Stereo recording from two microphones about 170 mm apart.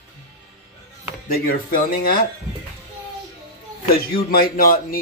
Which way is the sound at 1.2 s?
60° left (ahead or behind).